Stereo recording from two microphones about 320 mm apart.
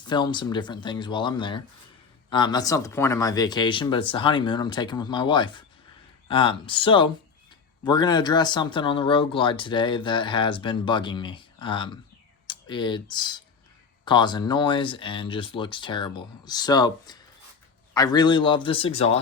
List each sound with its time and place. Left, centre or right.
0.0 s speech: centre